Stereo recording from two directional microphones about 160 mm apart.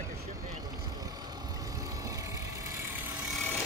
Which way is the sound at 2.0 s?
20° right (ahead or behind).